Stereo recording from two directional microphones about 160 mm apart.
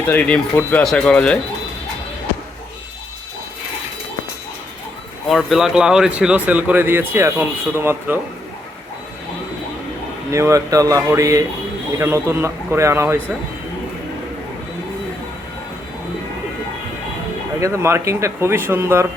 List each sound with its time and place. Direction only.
0.0 s speech: 10° left (ahead or behind)
5.3 s speech: centre (ahead or behind)
10.3 s speech: 20° right (ahead or behind)
17.6 s speech: 15° right (ahead or behind)